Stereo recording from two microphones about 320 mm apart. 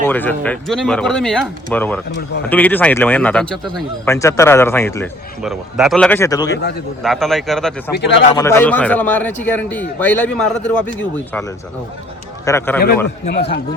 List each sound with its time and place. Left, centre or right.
0.0 s a man's voice: centre
7.9 s a man's voice: left
8.4 s a man's voice: centre
12.5 s speech: centre
13.2 s speech: centre